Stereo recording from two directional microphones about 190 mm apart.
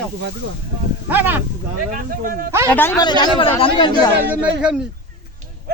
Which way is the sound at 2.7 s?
10° left (ahead or behind).